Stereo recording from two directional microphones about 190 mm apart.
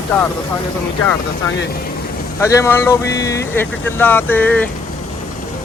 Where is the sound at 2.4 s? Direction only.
15° left (ahead or behind).